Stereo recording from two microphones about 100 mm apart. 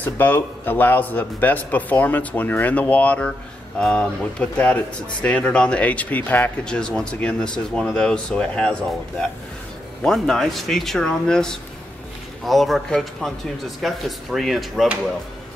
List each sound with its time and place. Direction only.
0.0 s a man's voice: 20° left (ahead or behind)
10.0 s speech: 5° left (ahead or behind)